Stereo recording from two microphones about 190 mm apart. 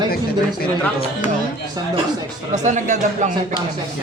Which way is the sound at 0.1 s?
55° left (ahead or behind).